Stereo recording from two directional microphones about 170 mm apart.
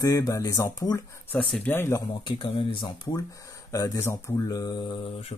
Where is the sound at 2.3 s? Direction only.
30° left (ahead or behind).